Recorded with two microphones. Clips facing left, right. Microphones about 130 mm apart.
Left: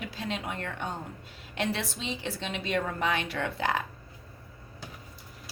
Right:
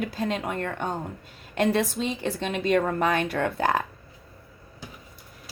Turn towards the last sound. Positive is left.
turn(degrees=-50)  # may be behind; listen again after turning